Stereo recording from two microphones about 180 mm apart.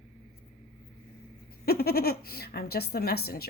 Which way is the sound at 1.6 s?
60° left (ahead or behind).